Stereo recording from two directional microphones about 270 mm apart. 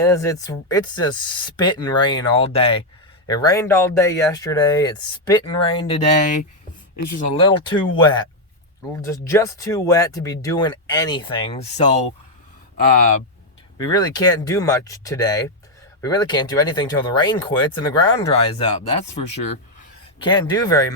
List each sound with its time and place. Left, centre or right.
0.0 s speech: centre
7.1 s speech: left
13.7 s speech: centre